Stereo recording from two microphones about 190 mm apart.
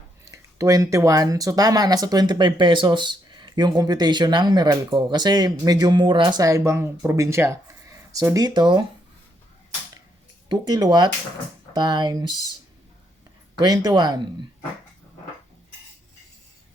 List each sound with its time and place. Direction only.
0.6 s speech: 15° right (ahead or behind)
10.5 s speech: 20° right (ahead or behind)
13.6 s speech: 20° right (ahead or behind)